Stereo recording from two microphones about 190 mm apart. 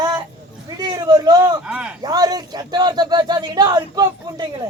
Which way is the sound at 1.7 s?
5° right (ahead or behind).